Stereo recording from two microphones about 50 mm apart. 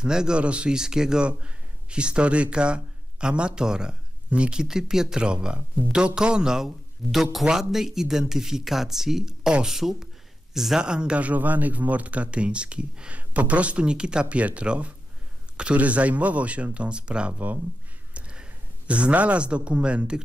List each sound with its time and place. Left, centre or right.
0.0 s a man's voice: centre
10.8 s speech: centre